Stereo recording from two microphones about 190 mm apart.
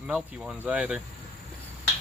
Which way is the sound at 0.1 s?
5° right (ahead or behind).